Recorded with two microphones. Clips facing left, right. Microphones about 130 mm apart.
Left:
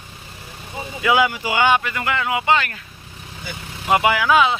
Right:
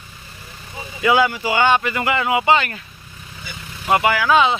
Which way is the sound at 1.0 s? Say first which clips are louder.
Right 2 dB; 10° left (ahead or behind).